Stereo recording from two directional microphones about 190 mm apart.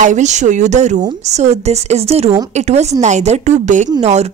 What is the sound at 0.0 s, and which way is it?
A woman's voice, 40° right (ahead or behind).